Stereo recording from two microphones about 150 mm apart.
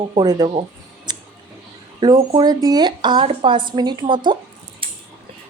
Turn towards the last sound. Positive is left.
turn(degrees=-30)  # may be behind; listen again after turning